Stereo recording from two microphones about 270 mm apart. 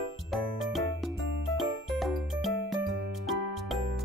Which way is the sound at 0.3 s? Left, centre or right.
Centre.